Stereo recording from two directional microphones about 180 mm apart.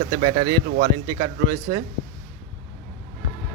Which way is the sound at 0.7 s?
50° right (ahead or behind).